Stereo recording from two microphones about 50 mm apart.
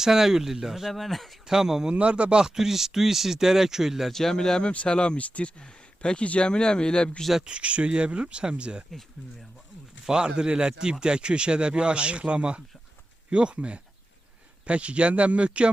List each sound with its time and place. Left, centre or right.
0.0 s speech: centre
1.5 s speech: centre
2.0 s speech: right
2.4 s speech: centre
4.1 s speech: centre
7.2 s speech: centre
7.4 s speech: right
10.1 s speech: centre